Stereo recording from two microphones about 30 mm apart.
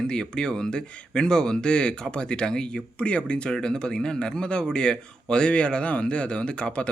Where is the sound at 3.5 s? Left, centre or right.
Left.